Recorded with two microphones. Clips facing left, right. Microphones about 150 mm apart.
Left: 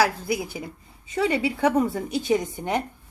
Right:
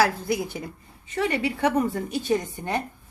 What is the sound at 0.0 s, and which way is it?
A woman's voice, 5° left (ahead or behind).